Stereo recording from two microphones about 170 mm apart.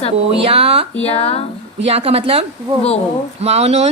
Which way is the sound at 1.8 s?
35° right (ahead or behind).